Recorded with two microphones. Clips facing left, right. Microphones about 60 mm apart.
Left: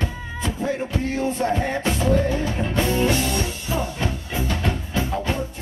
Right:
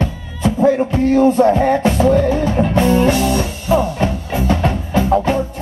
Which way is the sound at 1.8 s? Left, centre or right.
Right.